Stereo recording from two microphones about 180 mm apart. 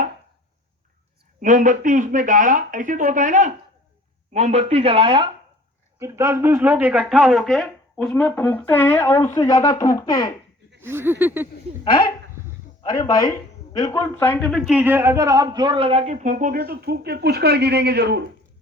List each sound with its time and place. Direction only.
1.4 s a man's voice: 45° right (ahead or behind); by 5.3 s 30° right (ahead or behind)
6.0 s speech: 15° right (ahead or behind); by 10.3 s 20° left (ahead or behind)
10.8 s speech: 15° right (ahead or behind)
11.9 s speech: 25° left (ahead or behind)
14.3 s a man's voice: centre (ahead or behind); by 18.2 s 65° right (ahead or behind)